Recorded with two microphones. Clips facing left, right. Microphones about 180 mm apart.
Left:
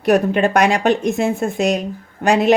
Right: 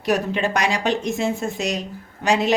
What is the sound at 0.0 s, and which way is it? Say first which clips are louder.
A woman's voice: left 7 dB; 55° left (ahead or behind).